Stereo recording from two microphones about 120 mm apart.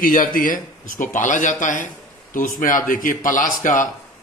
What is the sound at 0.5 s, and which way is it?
A man's voice, 90° left.